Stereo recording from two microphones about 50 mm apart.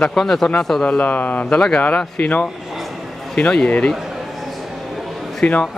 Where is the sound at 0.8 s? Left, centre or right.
Left.